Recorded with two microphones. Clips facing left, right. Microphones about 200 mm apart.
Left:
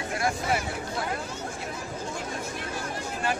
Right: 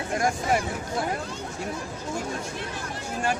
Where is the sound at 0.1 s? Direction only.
45° right (ahead or behind).